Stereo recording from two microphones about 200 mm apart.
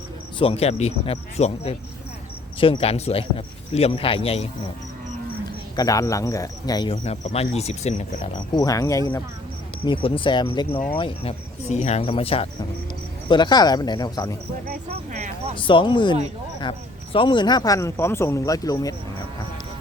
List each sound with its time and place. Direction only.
0.3 s speech: 30° left (ahead or behind)
5.7 s speech: 20° left (ahead or behind); by 8.3 s 35° left (ahead or behind)
8.5 s speech: 15° left (ahead or behind)
14.8 s speech: 35° right (ahead or behind)
15.5 s speech: 25° left (ahead or behind)